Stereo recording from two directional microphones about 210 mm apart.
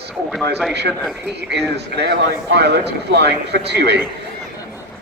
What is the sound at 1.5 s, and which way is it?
Speech, 50° right (ahead or behind).